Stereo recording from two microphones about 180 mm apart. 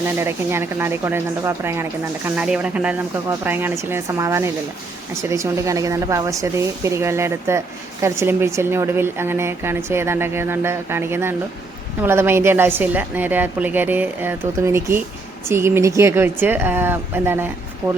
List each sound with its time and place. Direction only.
0.2 s a woman's voice: 15° right (ahead or behind)